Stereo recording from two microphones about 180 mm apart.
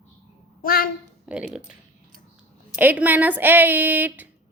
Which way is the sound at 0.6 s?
55° left (ahead or behind).